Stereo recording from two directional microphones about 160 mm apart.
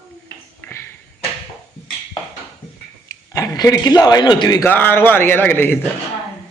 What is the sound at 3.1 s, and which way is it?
Speech, 20° left (ahead or behind).